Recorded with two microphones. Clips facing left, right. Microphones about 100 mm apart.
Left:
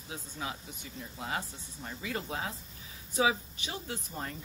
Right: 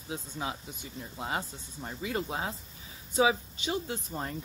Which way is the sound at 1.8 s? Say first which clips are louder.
Right 4 dB; 30° right (ahead or behind).